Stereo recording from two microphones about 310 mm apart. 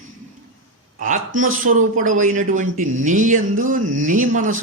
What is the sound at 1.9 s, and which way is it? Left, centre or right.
Speech, right.